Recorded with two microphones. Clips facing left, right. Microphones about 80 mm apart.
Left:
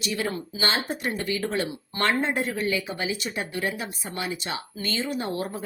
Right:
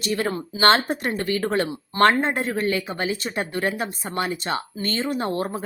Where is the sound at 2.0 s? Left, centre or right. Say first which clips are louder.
Right 6 dB; right.